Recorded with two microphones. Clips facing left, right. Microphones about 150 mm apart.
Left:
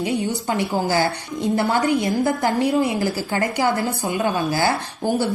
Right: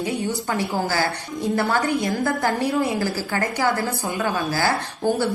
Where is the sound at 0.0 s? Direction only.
20° left (ahead or behind).